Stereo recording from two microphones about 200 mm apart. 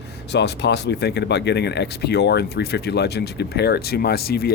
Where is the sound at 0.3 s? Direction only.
60° left (ahead or behind).